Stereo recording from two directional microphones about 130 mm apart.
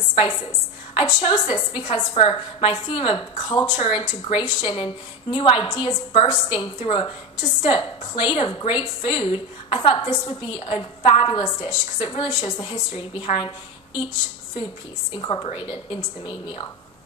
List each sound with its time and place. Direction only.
0.9 s a woman's voice: 45° left (ahead or behind)
15.1 s a woman's voice: 40° left (ahead or behind)